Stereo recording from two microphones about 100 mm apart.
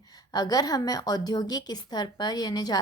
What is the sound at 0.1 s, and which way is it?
A woman's voice, 40° left (ahead or behind).